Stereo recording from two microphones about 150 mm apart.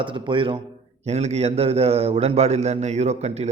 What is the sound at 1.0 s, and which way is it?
A man's voice, 45° right (ahead or behind).